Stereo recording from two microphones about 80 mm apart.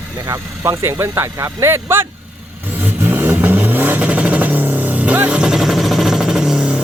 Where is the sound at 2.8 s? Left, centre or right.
Right.